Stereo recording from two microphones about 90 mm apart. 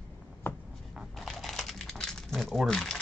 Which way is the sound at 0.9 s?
Centre (ahead or behind).